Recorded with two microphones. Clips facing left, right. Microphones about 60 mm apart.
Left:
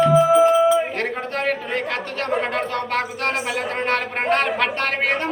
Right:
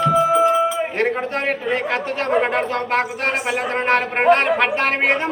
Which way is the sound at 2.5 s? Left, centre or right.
Centre.